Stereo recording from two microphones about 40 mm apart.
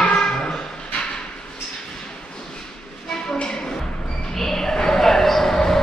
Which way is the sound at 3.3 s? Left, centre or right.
Left.